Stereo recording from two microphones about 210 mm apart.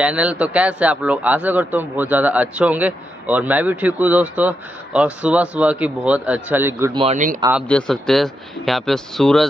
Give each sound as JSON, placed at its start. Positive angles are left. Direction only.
{"t": 0.0, "sound": "a man's voice", "side_deg": -5}
{"t": 6.9, "sound": "speech", "side_deg": -25}
{"t": 7.6, "sound": "speech", "side_deg": 5}